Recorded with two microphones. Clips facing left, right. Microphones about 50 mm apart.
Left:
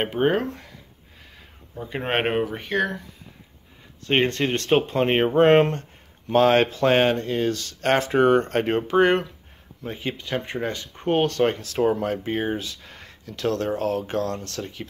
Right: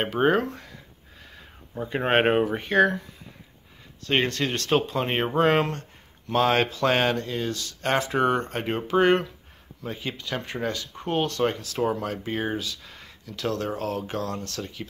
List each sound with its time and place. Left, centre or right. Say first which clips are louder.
0.0 s speech: even; centre
1.9 s speech: right 3 dB; centre
4.1 s speech: left 3 dB; left
8.9 s speech: left 1 dB; centre
9.8 s speech: left 2 dB; left
11.1 s speech: left 3 dB; left